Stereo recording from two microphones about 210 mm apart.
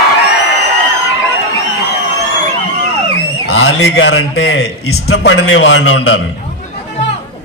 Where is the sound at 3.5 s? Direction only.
75° left (ahead or behind).